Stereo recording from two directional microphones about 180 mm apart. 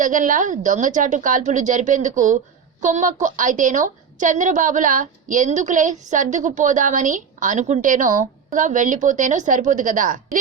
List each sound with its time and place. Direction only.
0.0 s a woman's voice: 45° right (ahead or behind)